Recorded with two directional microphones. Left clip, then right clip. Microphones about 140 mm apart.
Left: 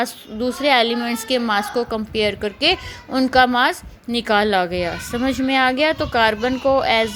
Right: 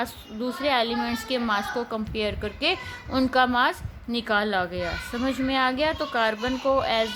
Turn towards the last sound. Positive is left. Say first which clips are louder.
# left 6 dB
turn(degrees=40)  # may be behind; listen again after turning